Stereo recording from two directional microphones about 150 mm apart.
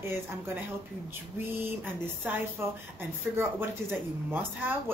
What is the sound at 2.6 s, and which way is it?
A man's voice, 15° right (ahead or behind).